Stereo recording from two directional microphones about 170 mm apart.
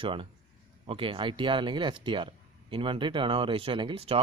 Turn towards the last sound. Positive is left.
turn(degrees=-35)  # may be behind; listen again after turning